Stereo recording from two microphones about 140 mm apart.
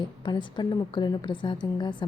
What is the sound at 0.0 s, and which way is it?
A woman's voice, 35° left (ahead or behind).